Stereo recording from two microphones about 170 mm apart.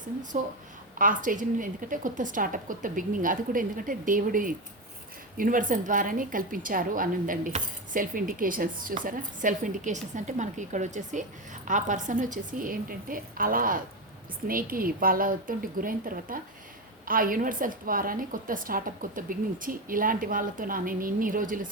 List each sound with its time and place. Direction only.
0.9 s a woman's voice: 50° right (ahead or behind)